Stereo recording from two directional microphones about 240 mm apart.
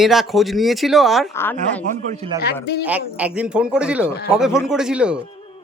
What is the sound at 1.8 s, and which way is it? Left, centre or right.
Speech, right.